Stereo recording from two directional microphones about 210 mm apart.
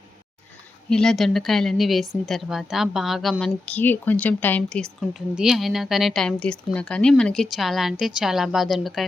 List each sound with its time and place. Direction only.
0.9 s speech: 5° left (ahead or behind)